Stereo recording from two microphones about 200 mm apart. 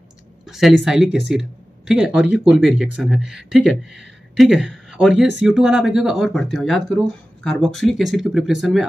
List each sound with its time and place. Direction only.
0.5 s speech: centre (ahead or behind)